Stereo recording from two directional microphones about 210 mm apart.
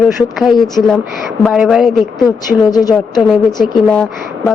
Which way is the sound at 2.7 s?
20° left (ahead or behind).